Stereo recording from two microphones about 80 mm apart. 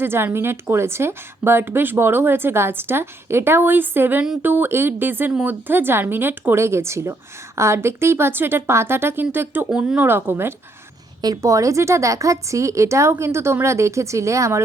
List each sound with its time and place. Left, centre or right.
0.0 s speech: right
5.3 s speech: centre
5.6 s speech: right
9.6 s speech: centre
10.0 s speech: right